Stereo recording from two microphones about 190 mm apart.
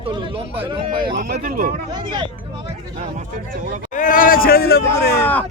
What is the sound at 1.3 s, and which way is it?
Speech, 45° right (ahead or behind).